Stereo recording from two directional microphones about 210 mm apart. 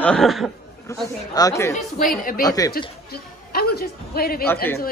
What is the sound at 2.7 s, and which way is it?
A man's voice, 45° left (ahead or behind).